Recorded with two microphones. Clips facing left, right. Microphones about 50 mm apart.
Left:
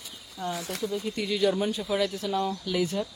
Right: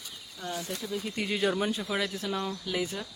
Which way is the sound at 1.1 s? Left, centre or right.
Right.